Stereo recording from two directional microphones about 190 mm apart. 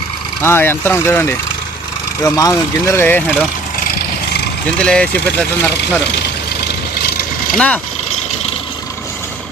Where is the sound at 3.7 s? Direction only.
50° left (ahead or behind).